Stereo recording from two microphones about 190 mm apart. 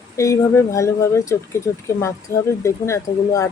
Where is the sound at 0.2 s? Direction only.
15° left (ahead or behind).